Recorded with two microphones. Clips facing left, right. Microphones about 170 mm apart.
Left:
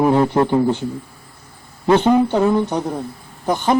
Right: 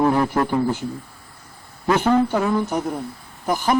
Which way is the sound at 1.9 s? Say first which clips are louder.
Left 4 dB; 25° left (ahead or behind).